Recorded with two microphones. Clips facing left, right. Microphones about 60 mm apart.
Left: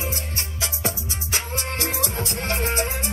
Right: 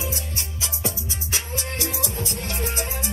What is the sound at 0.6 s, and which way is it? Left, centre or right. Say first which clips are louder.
Music: left 3 dB; left.